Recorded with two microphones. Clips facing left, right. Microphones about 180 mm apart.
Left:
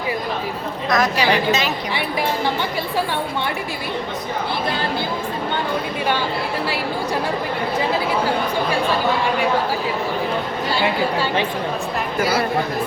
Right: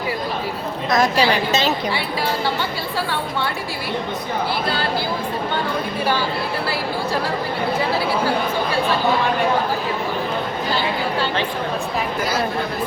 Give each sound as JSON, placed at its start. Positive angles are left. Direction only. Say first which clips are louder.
{"t": 0.9, "sound": "a woman's voice", "louder": "right 1 dB", "side_deg": -30}
{"t": 12.2, "sound": "speech", "louder": "left 4 dB", "side_deg": 10}